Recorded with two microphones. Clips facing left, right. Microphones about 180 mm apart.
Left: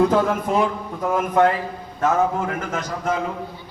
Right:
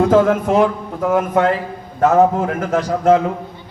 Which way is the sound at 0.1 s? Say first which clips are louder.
Right 6 dB; 75° right (ahead or behind).